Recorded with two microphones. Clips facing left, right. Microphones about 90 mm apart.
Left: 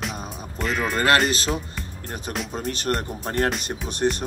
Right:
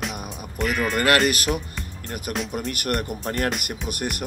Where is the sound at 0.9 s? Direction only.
25° left (ahead or behind).